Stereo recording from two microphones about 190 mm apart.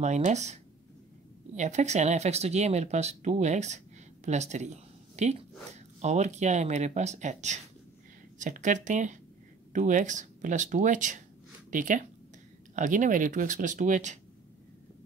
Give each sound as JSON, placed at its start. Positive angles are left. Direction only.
{"t": 0.0, "sound": "speech", "side_deg": -40}